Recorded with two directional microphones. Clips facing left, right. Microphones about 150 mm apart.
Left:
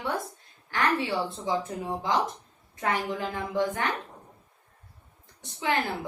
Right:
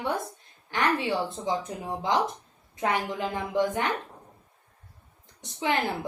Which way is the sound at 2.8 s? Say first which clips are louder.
Right 1 dB; 20° right (ahead or behind).